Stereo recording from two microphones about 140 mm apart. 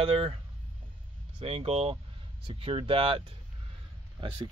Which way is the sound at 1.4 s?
40° right (ahead or behind).